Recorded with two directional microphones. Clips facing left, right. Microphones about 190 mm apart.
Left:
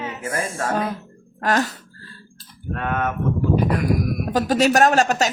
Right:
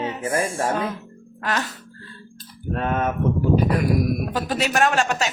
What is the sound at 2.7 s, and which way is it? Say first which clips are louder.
Speech: right 1 dB; 30° right (ahead or behind).